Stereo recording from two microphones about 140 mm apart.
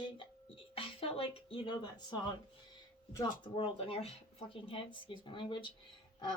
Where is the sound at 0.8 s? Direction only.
40° left (ahead or behind); by 3.5 s 25° left (ahead or behind).